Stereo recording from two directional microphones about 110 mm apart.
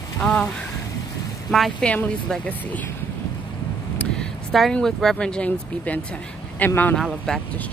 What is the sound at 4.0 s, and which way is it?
Speech, 5° left (ahead or behind).